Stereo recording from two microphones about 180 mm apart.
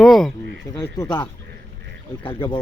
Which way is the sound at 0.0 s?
Centre (ahead or behind).